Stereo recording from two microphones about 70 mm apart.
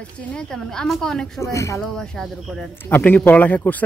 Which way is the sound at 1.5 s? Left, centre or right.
Left.